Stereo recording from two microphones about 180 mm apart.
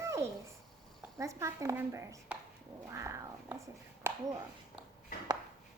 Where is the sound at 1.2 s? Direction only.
15° right (ahead or behind).